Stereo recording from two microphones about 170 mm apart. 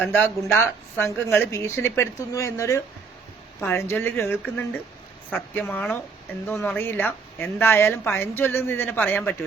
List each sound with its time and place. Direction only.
0.0 s a woman's voice: 10° left (ahead or behind)